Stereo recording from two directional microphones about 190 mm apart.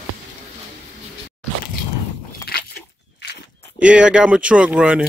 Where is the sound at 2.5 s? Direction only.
55° left (ahead or behind).